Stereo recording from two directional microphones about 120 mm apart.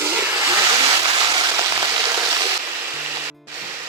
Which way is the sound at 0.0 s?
20° right (ahead or behind).